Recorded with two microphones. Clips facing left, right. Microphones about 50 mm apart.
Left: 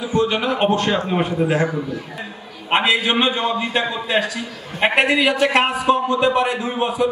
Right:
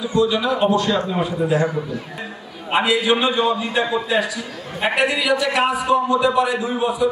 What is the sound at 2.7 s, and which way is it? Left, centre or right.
A man's voice, left.